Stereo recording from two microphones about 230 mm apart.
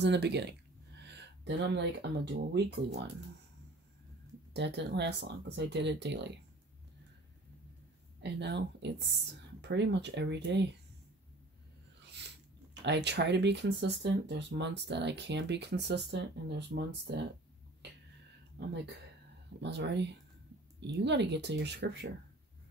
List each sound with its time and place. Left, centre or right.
0.0 s speech: right
1.0 s a sound: right
2.5 s speech: right
4.6 s speech: right
8.2 s speech: right
12.0 s a sound: right
12.8 s speech: right
19.6 s speech: right